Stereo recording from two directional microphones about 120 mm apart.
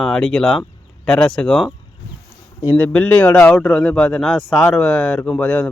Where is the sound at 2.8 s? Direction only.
15° left (ahead or behind).